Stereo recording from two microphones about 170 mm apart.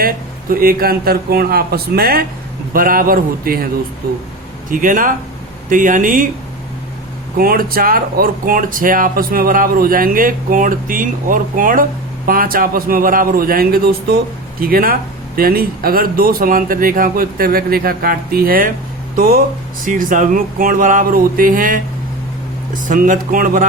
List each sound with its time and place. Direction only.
0.5 s speech: 60° right (ahead or behind)
4.7 s speech: 50° right (ahead or behind)
7.3 s speech: 60° right (ahead or behind)